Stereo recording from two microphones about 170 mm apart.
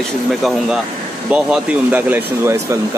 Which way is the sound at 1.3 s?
10° right (ahead or behind).